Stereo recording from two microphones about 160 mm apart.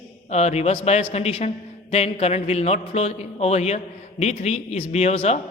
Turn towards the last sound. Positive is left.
turn(degrees=40)  # may be behind; listen again after turning